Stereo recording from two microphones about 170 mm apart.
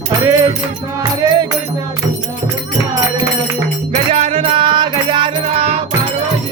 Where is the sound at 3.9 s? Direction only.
35° right (ahead or behind).